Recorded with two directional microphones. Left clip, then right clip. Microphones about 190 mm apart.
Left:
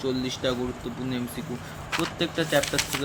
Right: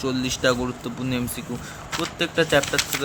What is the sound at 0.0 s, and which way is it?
Speech, 35° right (ahead or behind).